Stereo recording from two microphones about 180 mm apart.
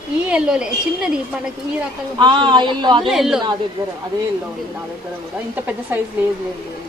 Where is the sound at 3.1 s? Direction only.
Centre (ahead or behind).